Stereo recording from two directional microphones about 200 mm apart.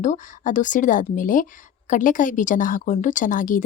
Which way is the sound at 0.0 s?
40° left (ahead or behind).